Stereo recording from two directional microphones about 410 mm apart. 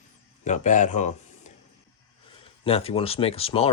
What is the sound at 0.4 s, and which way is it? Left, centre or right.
Speech, centre.